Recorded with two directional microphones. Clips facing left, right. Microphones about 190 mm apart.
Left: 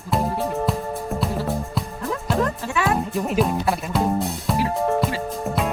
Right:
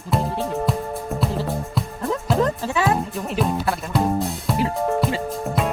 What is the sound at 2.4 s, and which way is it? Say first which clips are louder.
Music: right 2 dB; 20° right (ahead or behind).